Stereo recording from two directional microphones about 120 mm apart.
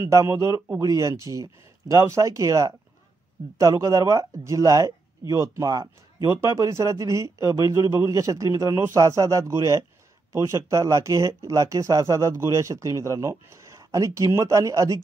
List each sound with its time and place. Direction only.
0.0 s speech: 25° right (ahead or behind)